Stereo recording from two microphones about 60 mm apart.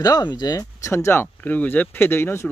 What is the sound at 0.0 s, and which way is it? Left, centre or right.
Speech, left.